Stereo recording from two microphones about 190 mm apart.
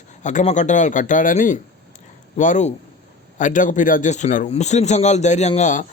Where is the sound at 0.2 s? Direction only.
40° left (ahead or behind).